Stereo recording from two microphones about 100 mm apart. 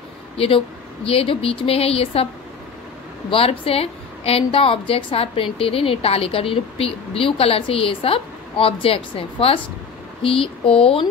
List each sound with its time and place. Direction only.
0.4 s a woman's voice: 70° left (ahead or behind)
3.3 s a woman's voice: 70° left (ahead or behind)